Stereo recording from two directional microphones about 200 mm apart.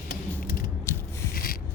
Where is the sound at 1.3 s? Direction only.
45° left (ahead or behind).